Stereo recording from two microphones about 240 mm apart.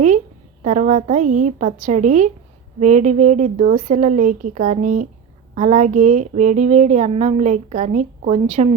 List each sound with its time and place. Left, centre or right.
0.6 s speech: right